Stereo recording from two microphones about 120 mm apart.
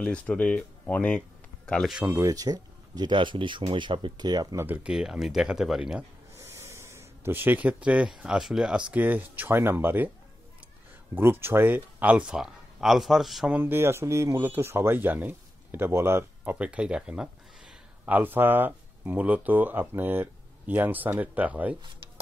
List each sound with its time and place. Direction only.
0.0 s speech: 10° left (ahead or behind)
2.0 s speech: 25° right (ahead or behind)
4.6 s speech: 15° right (ahead or behind)
6.3 s speech: 20° right (ahead or behind)
11.1 s speech: 20° right (ahead or behind); by 13.6 s centre (ahead or behind)
13.6 s speech: 20° right (ahead or behind)